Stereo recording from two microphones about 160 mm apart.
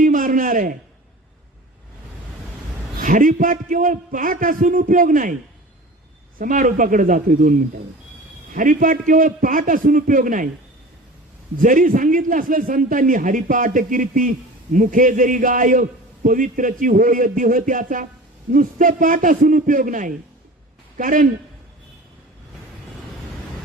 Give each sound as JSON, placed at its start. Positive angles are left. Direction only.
{"t": 0.0, "sound": "a sound", "side_deg": -55}
{"t": 3.0, "sound": "a man's voice", "side_deg": -55}
{"t": 6.4, "sound": "a man's voice", "side_deg": -55}
{"t": 8.5, "sound": "a man's voice", "side_deg": -55}
{"t": 11.5, "sound": "a man's voice", "side_deg": -55}